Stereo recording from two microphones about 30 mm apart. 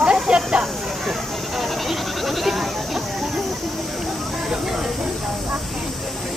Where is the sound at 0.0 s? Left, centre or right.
Right.